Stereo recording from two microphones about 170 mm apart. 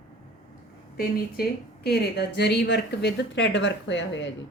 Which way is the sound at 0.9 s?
65° left (ahead or behind).